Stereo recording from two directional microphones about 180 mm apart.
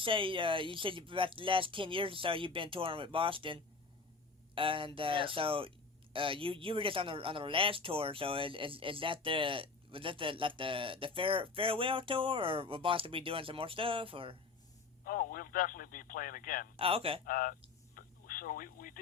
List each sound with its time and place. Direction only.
0.0 s speech: 30° right (ahead or behind)
15.0 s speech: 50° left (ahead or behind)
16.7 s a man's voice: 30° right (ahead or behind)
17.2 s speech: 50° left (ahead or behind)
17.9 s a sound: 50° left (ahead or behind)